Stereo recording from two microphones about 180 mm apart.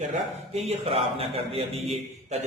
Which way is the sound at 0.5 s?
35° right (ahead or behind).